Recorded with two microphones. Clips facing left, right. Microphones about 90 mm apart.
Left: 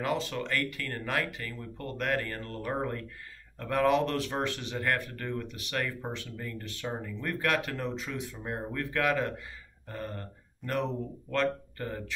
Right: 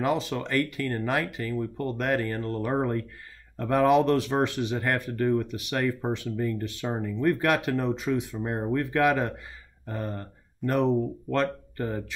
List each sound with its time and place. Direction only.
0.0 s speech: 15° right (ahead or behind)
10.6 s speech: centre (ahead or behind)
11.2 s speech: 20° right (ahead or behind)